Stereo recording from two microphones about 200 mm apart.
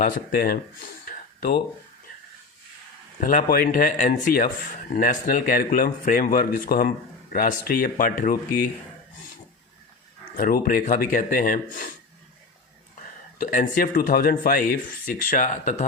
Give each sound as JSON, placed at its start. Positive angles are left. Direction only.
{"t": 0.0, "sound": "speech", "side_deg": 45}
{"t": 3.2, "sound": "speech", "side_deg": 40}
{"t": 10.3, "sound": "speech", "side_deg": 45}
{"t": 13.4, "sound": "speech", "side_deg": 40}